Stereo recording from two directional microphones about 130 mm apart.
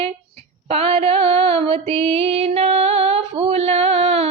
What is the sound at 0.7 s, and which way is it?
Female singing, 50° right (ahead or behind).